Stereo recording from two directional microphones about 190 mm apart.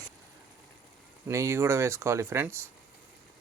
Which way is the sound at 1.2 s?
15° right (ahead or behind).